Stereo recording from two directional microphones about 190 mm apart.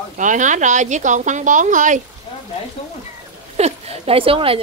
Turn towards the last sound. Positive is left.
turn(degrees=-30)  # may be behind; listen again after turning